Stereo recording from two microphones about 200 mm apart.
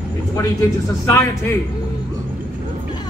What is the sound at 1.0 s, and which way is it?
Speech, 15° left (ahead or behind).